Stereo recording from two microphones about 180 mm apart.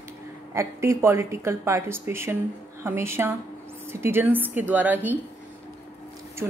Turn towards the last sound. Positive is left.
turn(degrees=-10)  # may be behind; listen again after turning